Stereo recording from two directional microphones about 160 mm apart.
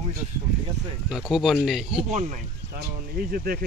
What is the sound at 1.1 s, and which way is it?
Speech, centre (ahead or behind).